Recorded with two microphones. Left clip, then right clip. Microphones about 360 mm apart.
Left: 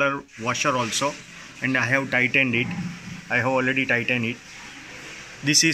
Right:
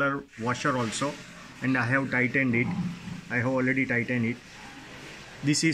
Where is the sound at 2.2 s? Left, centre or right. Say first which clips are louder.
Left 5 dB; left.